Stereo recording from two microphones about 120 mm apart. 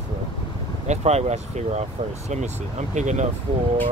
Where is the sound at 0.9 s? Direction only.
65° right (ahead or behind); by 3.2 s 80° right.